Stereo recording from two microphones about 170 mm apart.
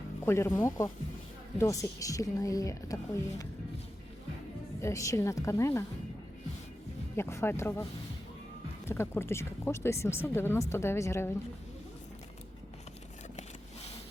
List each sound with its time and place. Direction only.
0.3 s a woman's voice: 15° left (ahead or behind)
4.8 s speech: 20° left (ahead or behind)
7.2 s speech: 15° left (ahead or behind)
8.9 s speech: 15° left (ahead or behind)